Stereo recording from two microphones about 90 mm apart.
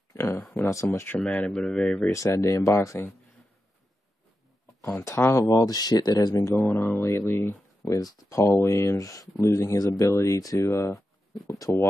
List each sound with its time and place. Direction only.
0.1 s a sound: 30° left (ahead or behind)
0.9 s speech: 20° left (ahead or behind)
1.2 s speech: 10° left (ahead or behind)
2.1 s speech: 30° left (ahead or behind)
5.0 s speech: 30° left (ahead or behind)
7.9 s speech: 35° left (ahead or behind)